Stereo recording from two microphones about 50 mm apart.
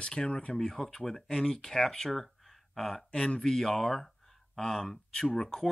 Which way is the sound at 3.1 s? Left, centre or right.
Centre.